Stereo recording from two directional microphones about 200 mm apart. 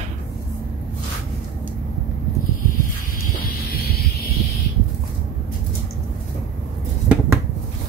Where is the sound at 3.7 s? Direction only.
50° left (ahead or behind).